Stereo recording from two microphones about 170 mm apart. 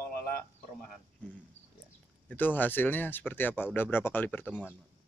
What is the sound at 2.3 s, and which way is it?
Speech, 10° left (ahead or behind).